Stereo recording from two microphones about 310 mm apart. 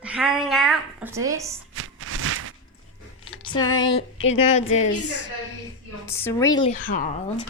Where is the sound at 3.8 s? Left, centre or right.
Left.